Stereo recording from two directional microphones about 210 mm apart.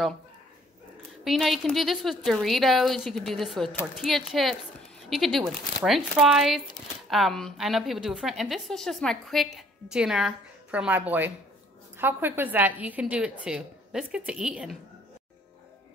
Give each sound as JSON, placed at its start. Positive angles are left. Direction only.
{"t": 1.2, "sound": "a woman's voice", "side_deg": 0}